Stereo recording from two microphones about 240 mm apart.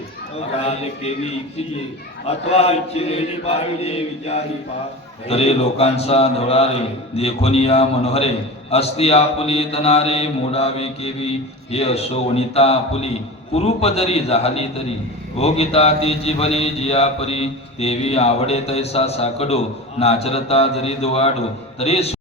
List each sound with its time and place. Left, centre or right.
0.6 s mantra: left